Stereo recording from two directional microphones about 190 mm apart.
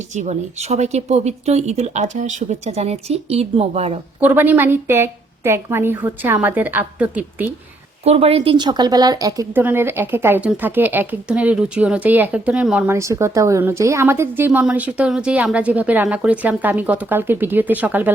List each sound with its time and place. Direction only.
0.1 s speech: 35° right (ahead or behind)
4.2 s speech: 10° right (ahead or behind)
8.0 s speech: 30° right (ahead or behind); by 18.1 s 10° right (ahead or behind)